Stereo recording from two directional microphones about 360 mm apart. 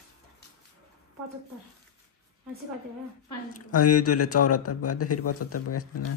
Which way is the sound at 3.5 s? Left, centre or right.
Left.